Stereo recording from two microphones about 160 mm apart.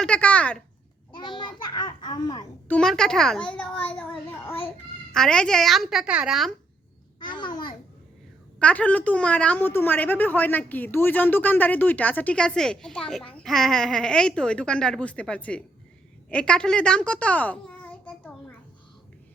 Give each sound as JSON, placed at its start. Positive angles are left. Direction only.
{"t": 0.0, "sound": "speech", "side_deg": 10}
{"t": 1.1, "sound": "a child's voice", "side_deg": 30}
{"t": 2.6, "sound": "a woman's voice", "side_deg": 5}
{"t": 7.2, "sound": "a child's voice", "side_deg": 30}
{"t": 8.5, "sound": "a woman's voice", "side_deg": 10}